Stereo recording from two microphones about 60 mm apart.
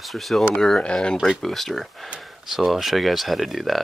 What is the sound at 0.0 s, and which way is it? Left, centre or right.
Speech, centre.